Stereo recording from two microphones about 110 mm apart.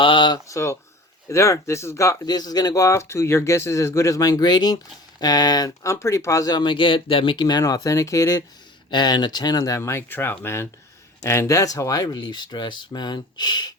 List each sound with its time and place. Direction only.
0.0 s speech: 45° left (ahead or behind)
0.4 s speech: 30° left (ahead or behind)
7.6 s speech: 30° left (ahead or behind)
8.9 s speech: 40° left (ahead or behind)